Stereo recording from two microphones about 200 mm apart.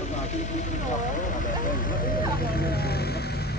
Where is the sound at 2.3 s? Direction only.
50° left (ahead or behind).